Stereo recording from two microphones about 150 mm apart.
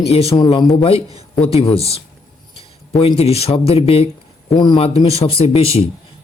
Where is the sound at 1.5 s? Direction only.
40° left (ahead or behind).